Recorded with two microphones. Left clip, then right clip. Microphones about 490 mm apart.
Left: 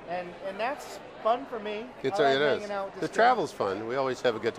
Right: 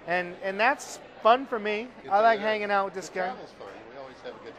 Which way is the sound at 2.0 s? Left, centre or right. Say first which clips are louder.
Right 6 dB; left.